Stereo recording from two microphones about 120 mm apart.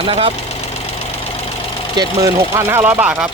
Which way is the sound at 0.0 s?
45° right (ahead or behind).